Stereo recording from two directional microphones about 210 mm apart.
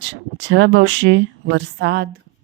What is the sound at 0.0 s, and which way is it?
A woman's voice, 60° right (ahead or behind).